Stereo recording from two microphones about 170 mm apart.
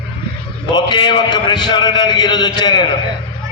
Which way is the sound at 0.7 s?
25° left (ahead or behind).